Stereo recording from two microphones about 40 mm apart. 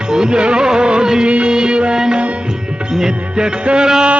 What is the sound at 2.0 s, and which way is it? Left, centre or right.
Music, centre.